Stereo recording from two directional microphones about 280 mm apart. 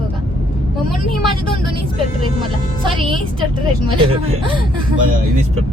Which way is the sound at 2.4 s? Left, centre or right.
Centre.